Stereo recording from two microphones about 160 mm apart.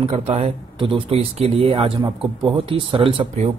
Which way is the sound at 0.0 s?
40° right (ahead or behind).